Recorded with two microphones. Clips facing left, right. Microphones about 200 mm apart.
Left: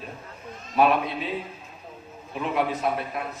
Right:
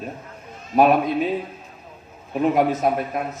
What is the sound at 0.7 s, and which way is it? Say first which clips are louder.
Speech: right 5 dB; 45° right (ahead or behind).